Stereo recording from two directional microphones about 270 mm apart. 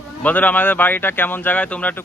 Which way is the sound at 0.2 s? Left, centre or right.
Centre.